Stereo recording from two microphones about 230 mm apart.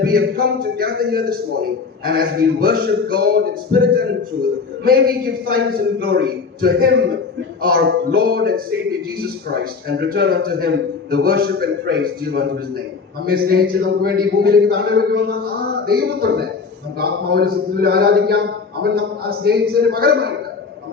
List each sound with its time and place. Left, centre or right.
0.0 s a man's voice: right